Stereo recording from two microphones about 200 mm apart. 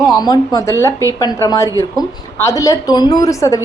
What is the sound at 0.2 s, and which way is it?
A woman's voice, 20° left (ahead or behind).